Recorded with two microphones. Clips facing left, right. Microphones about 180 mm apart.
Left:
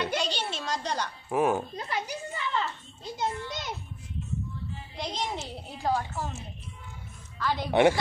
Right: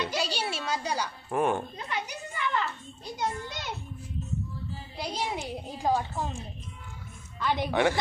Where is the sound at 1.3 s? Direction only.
5° left (ahead or behind).